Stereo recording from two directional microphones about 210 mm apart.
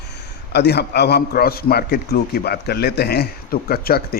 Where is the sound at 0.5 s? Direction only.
50° left (ahead or behind).